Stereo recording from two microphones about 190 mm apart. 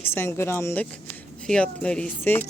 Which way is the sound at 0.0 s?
10° left (ahead or behind).